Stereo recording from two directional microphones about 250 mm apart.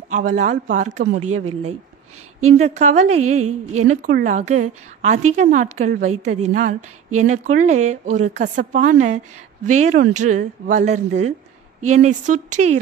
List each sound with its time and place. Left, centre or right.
0.1 s a woman's voice: right